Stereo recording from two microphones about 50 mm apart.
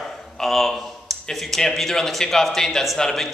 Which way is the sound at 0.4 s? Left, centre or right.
Centre.